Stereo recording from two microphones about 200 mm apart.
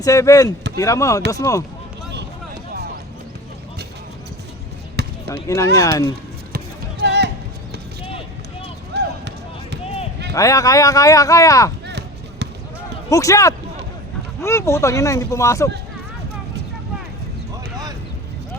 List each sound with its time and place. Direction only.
0.0 s speech: 15° left (ahead or behind)
5.0 s basketball bounce: 55° right (ahead or behind)
5.3 s speech: 15° left (ahead or behind)
7.0 s music: 60° right (ahead or behind)
8.9 s run: 60° right (ahead or behind)
10.3 s speech: 15° left (ahead or behind)
11.9 s a sound: 60° right (ahead or behind)
13.1 s speech: 15° left (ahead or behind)